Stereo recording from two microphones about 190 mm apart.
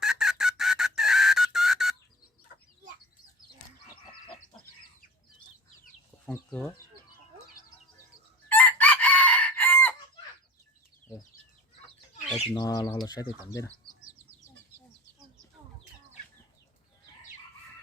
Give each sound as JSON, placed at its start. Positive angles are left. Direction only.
{"t": 0.0, "sound": "chicken", "side_deg": -5}
{"t": 6.2, "sound": "speech", "side_deg": 5}
{"t": 8.4, "sound": "chicken", "side_deg": 10}
{"t": 12.5, "sound": "speech", "side_deg": 20}